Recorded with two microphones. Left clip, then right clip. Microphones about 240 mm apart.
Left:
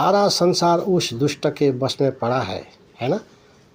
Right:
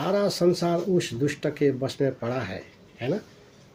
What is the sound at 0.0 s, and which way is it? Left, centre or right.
Speech, left.